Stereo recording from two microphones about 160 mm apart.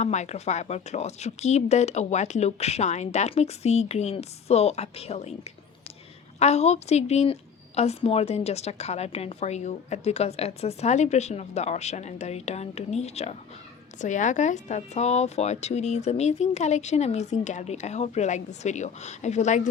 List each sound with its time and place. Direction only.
0.0 s speech: 45° left (ahead or behind)
6.4 s speech: 45° left (ahead or behind)